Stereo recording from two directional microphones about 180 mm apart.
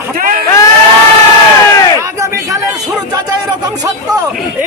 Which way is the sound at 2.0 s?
15° right (ahead or behind).